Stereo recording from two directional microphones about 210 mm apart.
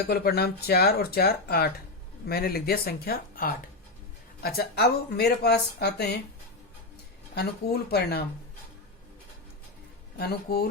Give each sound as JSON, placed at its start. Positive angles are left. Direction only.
{"t": 0.1, "sound": "speech", "side_deg": 50}
{"t": 7.3, "sound": "speech", "side_deg": 50}
{"t": 10.2, "sound": "speech", "side_deg": 50}